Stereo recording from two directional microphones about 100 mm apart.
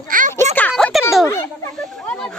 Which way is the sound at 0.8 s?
5° left (ahead or behind).